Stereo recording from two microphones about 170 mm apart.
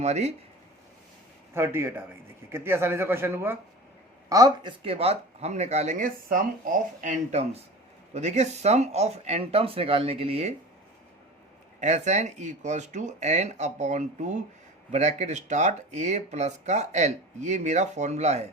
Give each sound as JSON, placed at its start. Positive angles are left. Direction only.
{"t": 0.0, "sound": "speech", "side_deg": -40}
{"t": 1.5, "sound": "speech", "side_deg": -15}
{"t": 11.8, "sound": "speech", "side_deg": -45}